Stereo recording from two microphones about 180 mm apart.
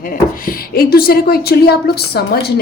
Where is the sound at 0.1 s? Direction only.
55° left (ahead or behind).